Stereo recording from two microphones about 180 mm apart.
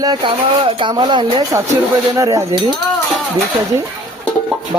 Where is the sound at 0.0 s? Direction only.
25° right (ahead or behind).